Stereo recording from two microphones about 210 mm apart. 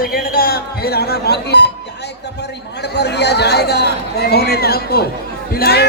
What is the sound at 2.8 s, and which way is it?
Speech, 50° left (ahead or behind).